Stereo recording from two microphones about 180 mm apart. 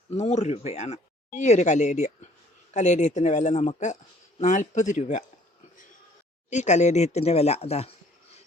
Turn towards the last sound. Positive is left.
turn(degrees=35)  # may be behind; listen again after turning